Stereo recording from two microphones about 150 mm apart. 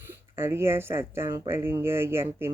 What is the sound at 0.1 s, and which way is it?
Speech, 15° right (ahead or behind).